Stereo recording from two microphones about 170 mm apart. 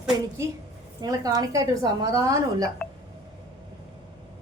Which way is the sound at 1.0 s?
20° right (ahead or behind).